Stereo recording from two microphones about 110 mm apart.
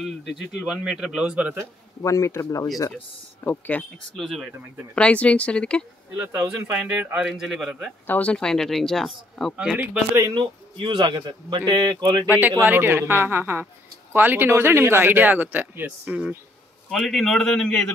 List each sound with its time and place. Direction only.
0.0 s speech: 5° right (ahead or behind)
2.0 s speech: 30° left (ahead or behind)
3.4 s speech: 15° left (ahead or behind)
4.2 s speech: centre (ahead or behind)
4.9 s speech: 10° left (ahead or behind)
6.7 s speech: 10° right (ahead or behind)
8.1 s speech: 10° left (ahead or behind)
9.6 s speech: 10° right (ahead or behind)
10.3 s a man's voice: 45° right (ahead or behind)
12.3 s speech: 15° right (ahead or behind)
16.9 s speech: centre (ahead or behind)